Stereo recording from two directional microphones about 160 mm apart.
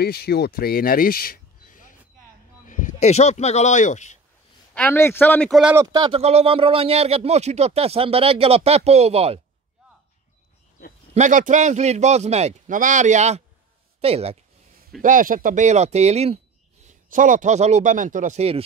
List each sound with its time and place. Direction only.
0.0 s speech: 75° left (ahead or behind); by 4.2 s 50° left (ahead or behind)
4.7 s a man's voice: 15° left (ahead or behind)
5.5 s speech: 5° right (ahead or behind)
5.9 s speech: 30° right (ahead or behind)
11.1 s a man's voice: 50° right (ahead or behind)
15.0 s a man's voice: 60° right (ahead or behind); by 16.3 s 40° right (ahead or behind)
16.8 s a man's voice: 55° right (ahead or behind)